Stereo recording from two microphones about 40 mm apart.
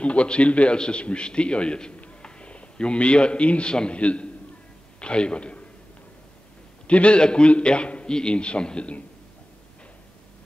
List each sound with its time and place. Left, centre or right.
0.0 s a man's voice: left
6.9 s a man's voice: left